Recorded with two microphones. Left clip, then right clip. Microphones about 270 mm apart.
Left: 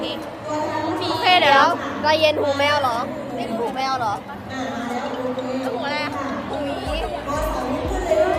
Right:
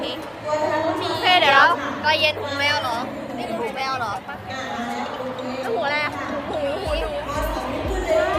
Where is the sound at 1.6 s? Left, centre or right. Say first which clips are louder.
Right 1 dB; left; by 4.1 s centre.